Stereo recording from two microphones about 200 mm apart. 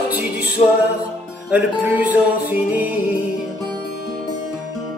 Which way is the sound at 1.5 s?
5° right (ahead or behind).